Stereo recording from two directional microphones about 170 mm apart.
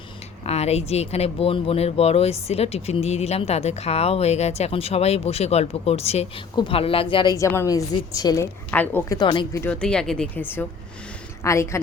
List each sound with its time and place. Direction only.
0.4 s speech: 40° left (ahead or behind)
7.3 s a woman's voice: 15° left (ahead or behind)
8.7 s speech: 10° left (ahead or behind)
9.1 s a woman's voice: 30° left (ahead or behind)
9.6 s speech: 5° left (ahead or behind)